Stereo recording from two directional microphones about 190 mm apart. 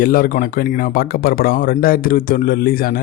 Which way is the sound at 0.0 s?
50° left (ahead or behind).